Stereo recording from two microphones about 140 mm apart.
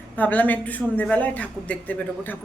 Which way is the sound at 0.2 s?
10° left (ahead or behind).